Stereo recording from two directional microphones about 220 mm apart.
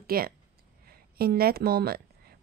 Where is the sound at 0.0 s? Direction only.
45° right (ahead or behind).